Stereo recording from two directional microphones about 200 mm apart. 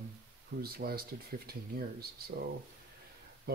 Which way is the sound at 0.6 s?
50° right (ahead or behind).